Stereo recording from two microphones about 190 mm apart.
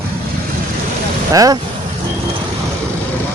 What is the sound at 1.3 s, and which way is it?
Speech, 20° right (ahead or behind).